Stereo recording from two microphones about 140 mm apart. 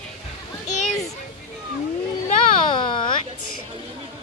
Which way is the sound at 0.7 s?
60° left (ahead or behind).